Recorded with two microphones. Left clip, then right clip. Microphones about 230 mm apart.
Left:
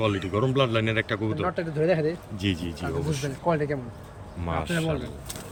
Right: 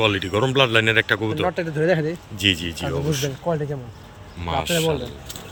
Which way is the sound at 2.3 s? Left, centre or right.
Centre.